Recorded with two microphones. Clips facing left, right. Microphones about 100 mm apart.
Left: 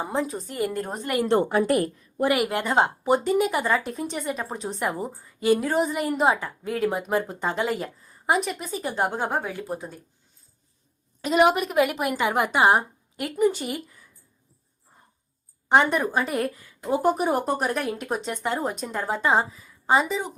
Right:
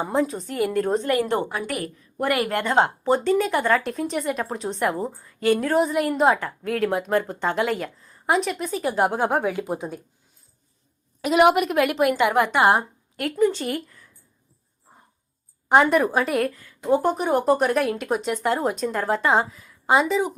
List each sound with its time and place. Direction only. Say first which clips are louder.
0.0 s a woman's voice: right 4 dB; centre (ahead or behind)
1.1 s a woman's voice: left 2 dB; 30° left (ahead or behind)
2.2 s a woman's voice: left 1 dB; 15° left (ahead or behind)
2.5 s a woman's voice: right 2 dB; 5° left (ahead or behind)
3.0 s a woman's voice: right 1 dB; 15° left (ahead or behind)
3.5 s a woman's voice: right 3 dB; 5° left (ahead or behind); by 10.0 s 20° right (ahead or behind)
11.2 s a woman's voice: right 3 dB; 5° right (ahead or behind)
15.7 s a woman's voice: right 3 dB; centre (ahead or behind)